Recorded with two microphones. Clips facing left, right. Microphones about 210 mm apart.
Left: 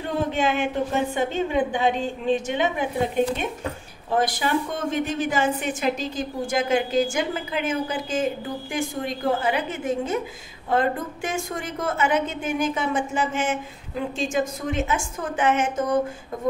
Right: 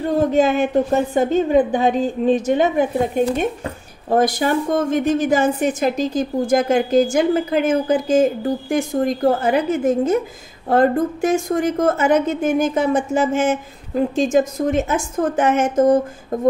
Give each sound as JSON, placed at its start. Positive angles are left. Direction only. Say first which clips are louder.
{"t": 0.2, "sound": "a woman's voice", "louder": "right 7 dB", "side_deg": -40}